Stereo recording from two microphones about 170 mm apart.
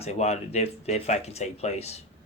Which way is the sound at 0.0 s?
40° left (ahead or behind).